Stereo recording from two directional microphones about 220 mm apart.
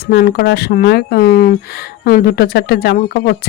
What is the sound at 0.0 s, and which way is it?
Speech, 45° left (ahead or behind).